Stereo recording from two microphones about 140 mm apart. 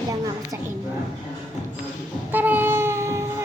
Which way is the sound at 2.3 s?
15° right (ahead or behind).